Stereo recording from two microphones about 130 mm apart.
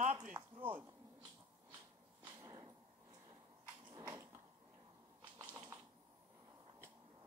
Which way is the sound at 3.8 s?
35° right (ahead or behind).